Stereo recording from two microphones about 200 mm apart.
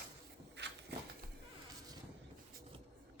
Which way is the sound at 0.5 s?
60° right (ahead or behind).